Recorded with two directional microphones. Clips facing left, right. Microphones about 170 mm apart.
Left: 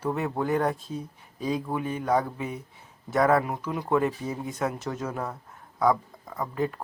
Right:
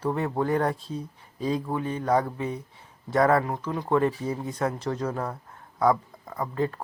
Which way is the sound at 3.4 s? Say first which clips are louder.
Right 1 dB; 10° left (ahead or behind).